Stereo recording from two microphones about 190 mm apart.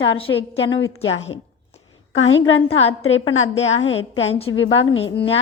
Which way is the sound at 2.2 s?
90° left.